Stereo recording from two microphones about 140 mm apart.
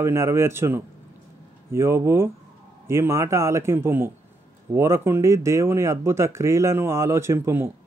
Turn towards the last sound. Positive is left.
turn(degrees=-15)  # may be behind; listen again after turning